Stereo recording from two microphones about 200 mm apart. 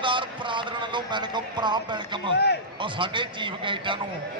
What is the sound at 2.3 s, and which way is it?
Speech, 55° left (ahead or behind).